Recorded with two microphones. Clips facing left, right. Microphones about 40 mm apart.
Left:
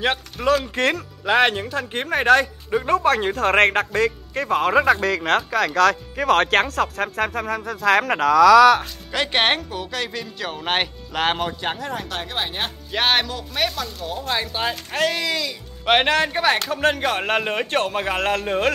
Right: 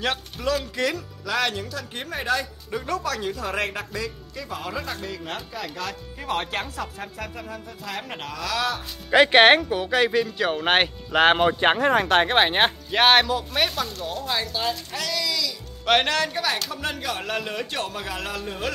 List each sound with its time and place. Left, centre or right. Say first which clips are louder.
0.0 s speech: left 4 dB; left
0.6 s speech: left 4 dB; left
2.7 s speech: left 9 dB; left
5.0 s speech: left 12 dB; left
5.8 s speech: left 15 dB; left
9.1 s speech: right 6 dB; centre
11.6 s speech: right 8 dB; right
12.9 s speech: right 2 dB; centre
14.3 s speech: left 3 dB; left
15.8 s speech: left 3 dB; left